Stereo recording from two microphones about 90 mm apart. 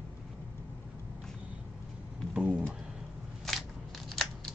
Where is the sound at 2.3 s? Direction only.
10° right (ahead or behind).